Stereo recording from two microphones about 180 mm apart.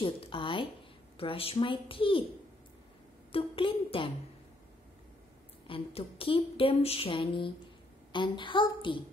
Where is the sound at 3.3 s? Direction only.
30° left (ahead or behind).